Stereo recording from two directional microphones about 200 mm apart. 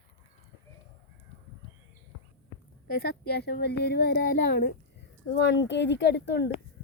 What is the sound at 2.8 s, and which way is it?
A woman's voice, 50° left (ahead or behind).